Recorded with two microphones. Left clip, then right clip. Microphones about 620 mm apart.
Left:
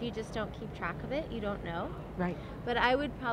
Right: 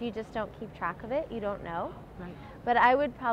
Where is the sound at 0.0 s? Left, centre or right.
Right.